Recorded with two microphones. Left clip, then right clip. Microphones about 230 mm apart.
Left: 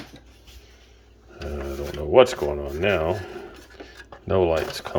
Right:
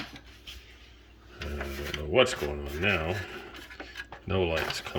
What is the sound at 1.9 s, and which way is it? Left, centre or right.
Speech, centre.